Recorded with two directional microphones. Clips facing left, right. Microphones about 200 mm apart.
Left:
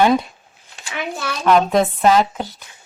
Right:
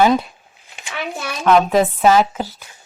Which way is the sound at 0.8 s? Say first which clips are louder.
Even; 20° right (ahead or behind).